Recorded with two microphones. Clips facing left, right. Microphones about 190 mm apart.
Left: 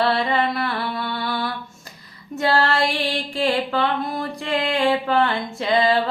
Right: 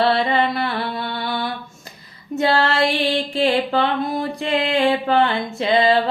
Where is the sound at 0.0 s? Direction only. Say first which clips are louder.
Right 2 dB; 25° right (ahead or behind).